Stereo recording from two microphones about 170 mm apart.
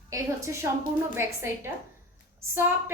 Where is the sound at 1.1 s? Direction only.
15° right (ahead or behind).